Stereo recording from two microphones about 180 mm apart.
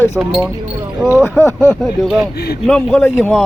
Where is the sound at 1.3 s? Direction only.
10° left (ahead or behind).